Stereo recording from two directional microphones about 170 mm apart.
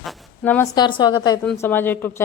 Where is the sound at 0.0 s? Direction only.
Centre (ahead or behind).